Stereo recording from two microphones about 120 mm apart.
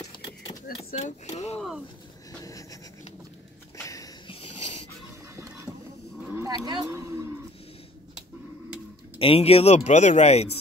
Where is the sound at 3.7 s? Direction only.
30° left (ahead or behind).